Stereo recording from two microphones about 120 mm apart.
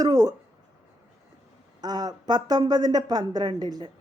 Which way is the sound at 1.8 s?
35° right (ahead or behind).